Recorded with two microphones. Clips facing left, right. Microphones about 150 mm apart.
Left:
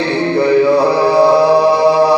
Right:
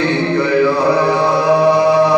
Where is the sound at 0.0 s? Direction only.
30° left (ahead or behind).